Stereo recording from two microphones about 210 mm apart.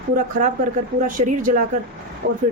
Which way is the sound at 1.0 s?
40° right (ahead or behind).